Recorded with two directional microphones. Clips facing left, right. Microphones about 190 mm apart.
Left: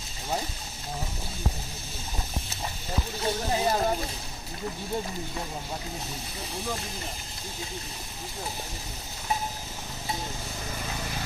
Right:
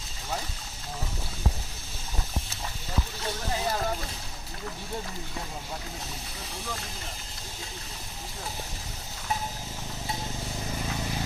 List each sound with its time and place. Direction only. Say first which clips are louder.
3.2 s speech: left 6 dB; 20° left (ahead or behind)